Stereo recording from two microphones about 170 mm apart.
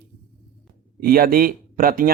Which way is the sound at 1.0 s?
60° right (ahead or behind).